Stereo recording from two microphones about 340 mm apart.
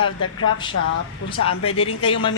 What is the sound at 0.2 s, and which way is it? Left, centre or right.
Speech, left.